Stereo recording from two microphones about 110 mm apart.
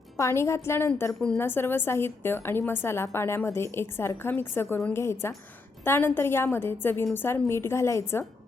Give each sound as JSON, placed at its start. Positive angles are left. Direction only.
{"t": 0.2, "sound": "a woman's voice", "side_deg": 25}